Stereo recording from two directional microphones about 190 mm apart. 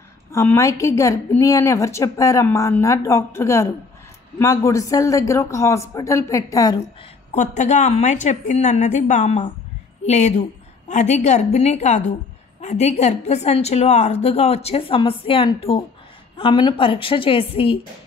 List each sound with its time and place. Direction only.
0.3 s a woman's voice: 15° left (ahead or behind)
7.3 s a woman's voice: 40° left (ahead or behind)